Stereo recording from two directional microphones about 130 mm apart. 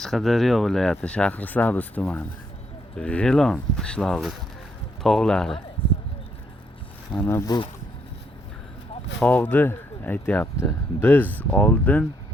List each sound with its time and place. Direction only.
0.0 s speech: centre (ahead or behind)
7.1 s speech: 15° left (ahead or behind)
7.4 s speech: 35° left (ahead or behind)
9.2 s speech: 15° left (ahead or behind)